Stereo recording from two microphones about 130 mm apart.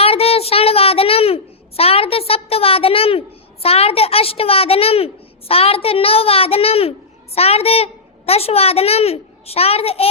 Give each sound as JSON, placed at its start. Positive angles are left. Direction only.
{"t": 0.0, "sound": "a child's voice", "side_deg": 50}